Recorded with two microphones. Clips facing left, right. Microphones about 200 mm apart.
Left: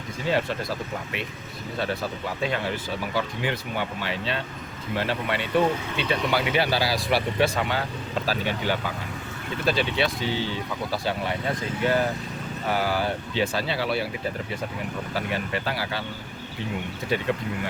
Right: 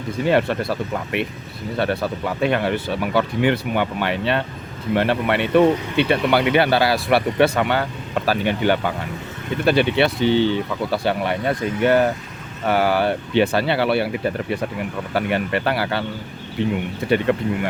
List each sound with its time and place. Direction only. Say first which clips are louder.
0.3 s speech: right 6 dB; 65° right (ahead or behind)
17.1 s speech: right 8 dB; 60° right (ahead or behind)